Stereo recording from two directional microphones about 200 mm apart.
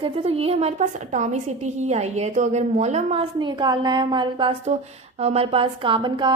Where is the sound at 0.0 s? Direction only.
30° right (ahead or behind).